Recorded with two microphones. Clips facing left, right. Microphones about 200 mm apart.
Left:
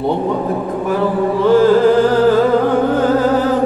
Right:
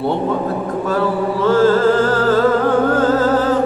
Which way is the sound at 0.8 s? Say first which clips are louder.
Left 2 dB; 15° left (ahead or behind).